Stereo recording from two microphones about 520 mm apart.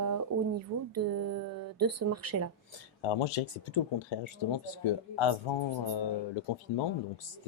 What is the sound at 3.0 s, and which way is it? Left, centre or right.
Speech, left.